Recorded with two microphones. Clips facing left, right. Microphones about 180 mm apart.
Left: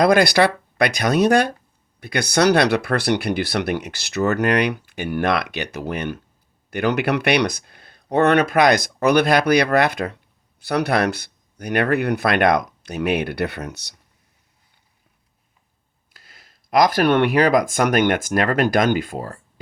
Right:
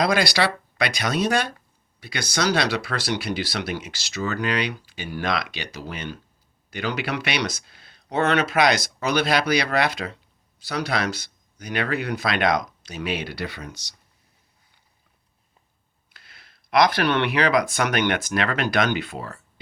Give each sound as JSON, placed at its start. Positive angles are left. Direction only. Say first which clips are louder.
{"t": 0.0, "sound": "speech", "louder": "left 6 dB", "side_deg": 55}
{"t": 16.1, "sound": "speech", "louder": "left 2 dB", "side_deg": 40}